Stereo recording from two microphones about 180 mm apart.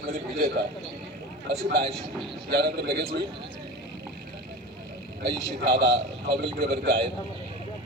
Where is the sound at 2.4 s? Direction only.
65° right (ahead or behind).